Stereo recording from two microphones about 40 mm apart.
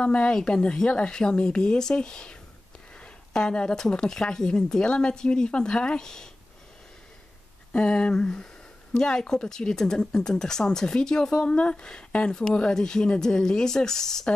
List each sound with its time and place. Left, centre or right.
0.0 s speech: left
3.3 s speech: left
7.7 s speech: left